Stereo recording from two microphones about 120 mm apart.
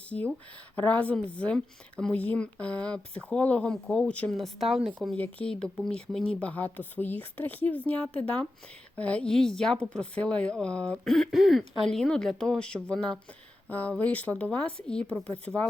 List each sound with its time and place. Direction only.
0.1 s a woman's voice: 10° left (ahead or behind)
5.1 s a woman's voice: 10° left (ahead or behind)
15.5 s speech: 20° right (ahead or behind)